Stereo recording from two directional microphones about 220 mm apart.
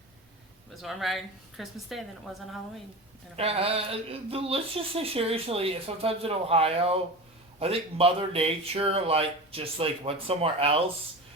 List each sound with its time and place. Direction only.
0.7 s a woman's voice: centre (ahead or behind)
3.3 s speech: 25° right (ahead or behind)